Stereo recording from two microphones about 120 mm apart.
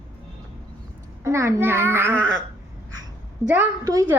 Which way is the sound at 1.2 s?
20° right (ahead or behind).